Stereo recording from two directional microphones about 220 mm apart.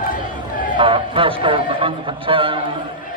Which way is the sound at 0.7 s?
25° right (ahead or behind).